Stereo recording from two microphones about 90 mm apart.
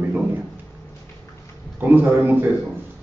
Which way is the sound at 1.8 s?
20° right (ahead or behind).